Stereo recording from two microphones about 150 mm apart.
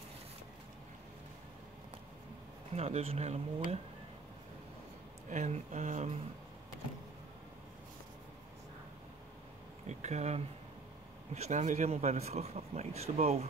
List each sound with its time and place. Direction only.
2.7 s speech: 45° right (ahead or behind)
5.3 s speech: 50° right (ahead or behind)
9.8 s a sound: 50° right (ahead or behind)
11.3 s speech: 50° right (ahead or behind)